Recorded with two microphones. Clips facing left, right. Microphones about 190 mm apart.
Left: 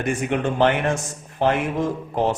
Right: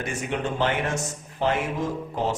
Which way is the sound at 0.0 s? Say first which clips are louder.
Left 6 dB; 55° left (ahead or behind).